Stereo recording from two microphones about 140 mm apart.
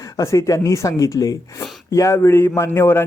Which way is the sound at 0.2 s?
20° left (ahead or behind).